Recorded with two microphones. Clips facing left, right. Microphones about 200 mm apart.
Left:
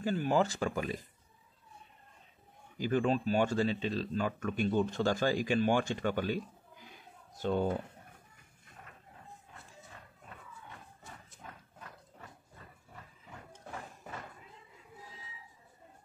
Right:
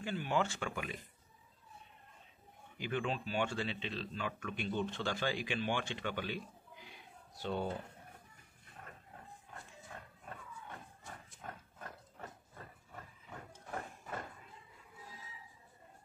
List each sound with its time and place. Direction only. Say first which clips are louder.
0.0 s speech: left 6 dB; 40° left (ahead or behind)
2.8 s speech: left 8 dB; 40° left (ahead or behind)
11.4 s wild animals: right 3 dB; 50° right (ahead or behind)